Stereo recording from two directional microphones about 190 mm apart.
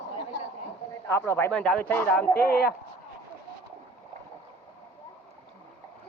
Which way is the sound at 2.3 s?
55° left (ahead or behind).